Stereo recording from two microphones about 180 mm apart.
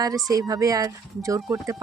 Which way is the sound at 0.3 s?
20° right (ahead or behind).